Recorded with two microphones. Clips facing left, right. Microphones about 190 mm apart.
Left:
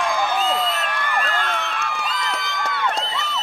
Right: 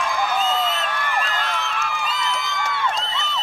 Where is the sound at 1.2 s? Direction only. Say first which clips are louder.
Left 3 dB; 50° left (ahead or behind).